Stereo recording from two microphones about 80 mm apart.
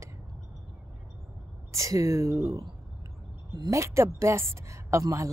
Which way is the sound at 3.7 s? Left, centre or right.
Right.